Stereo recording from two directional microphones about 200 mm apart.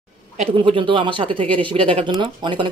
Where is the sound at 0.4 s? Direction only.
25° right (ahead or behind).